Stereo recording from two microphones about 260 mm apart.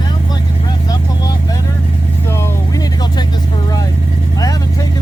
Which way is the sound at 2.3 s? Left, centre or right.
Centre.